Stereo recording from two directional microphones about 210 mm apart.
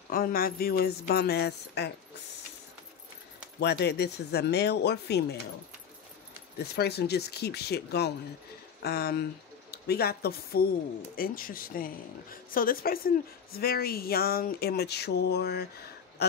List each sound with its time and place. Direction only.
0.1 s speech: 45° left (ahead or behind)
3.5 s speech: 50° left (ahead or behind)
6.7 s speech: 50° left (ahead or behind)
16.2 s a sound: 50° left (ahead or behind)